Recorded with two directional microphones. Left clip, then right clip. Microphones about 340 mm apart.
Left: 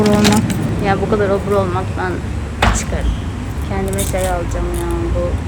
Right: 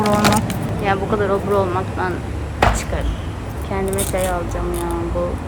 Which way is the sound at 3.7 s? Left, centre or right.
Centre.